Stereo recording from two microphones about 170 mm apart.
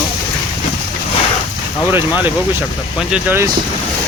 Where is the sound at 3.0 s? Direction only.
5° right (ahead or behind).